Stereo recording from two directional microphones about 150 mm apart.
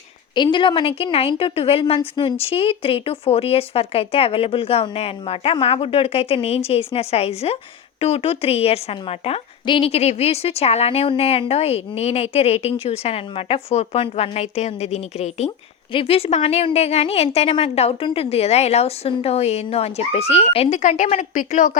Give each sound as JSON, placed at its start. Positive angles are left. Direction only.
{"t": 0.3, "sound": "a woman's voice", "side_deg": 30}